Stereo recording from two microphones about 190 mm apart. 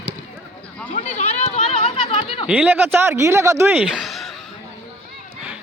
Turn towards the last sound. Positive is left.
turn(degrees=0)  # may be behind; listen again after turning